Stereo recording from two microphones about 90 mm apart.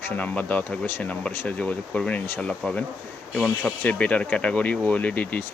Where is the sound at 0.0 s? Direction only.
20° left (ahead or behind).